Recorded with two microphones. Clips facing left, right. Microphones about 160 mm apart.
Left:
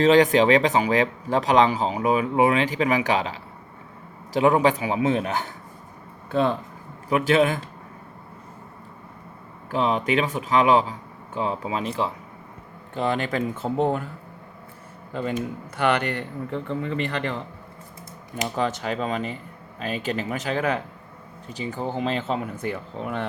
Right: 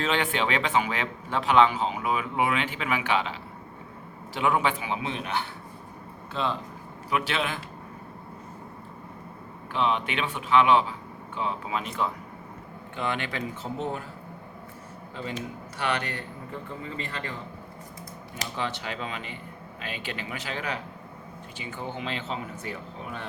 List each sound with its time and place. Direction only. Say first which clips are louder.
0.0 s speech: left 11 dB; 40° left (ahead or behind)
4.4 s speech: left 7 dB; 40° left (ahead or behind)
9.7 s speech: left 5 dB; 40° left (ahead or behind); by 14.0 s 55° left (ahead or behind)
15.1 s a man's voice: left 8 dB; 55° left (ahead or behind); by 17.3 s 70° left (ahead or behind)
18.4 s speech: left 7 dB; 45° left (ahead or behind); by 23.2 s 60° left (ahead or behind)